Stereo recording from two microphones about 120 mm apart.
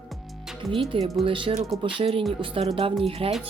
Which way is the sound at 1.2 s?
45° right (ahead or behind).